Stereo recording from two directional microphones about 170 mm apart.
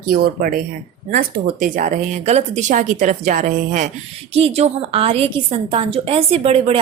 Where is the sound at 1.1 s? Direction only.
55° right (ahead or behind).